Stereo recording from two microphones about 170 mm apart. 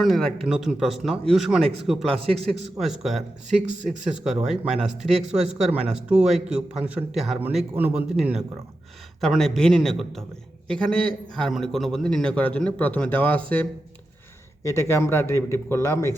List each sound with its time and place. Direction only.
0.0 s a man's voice: centre (ahead or behind); by 16.1 s 15° left (ahead or behind)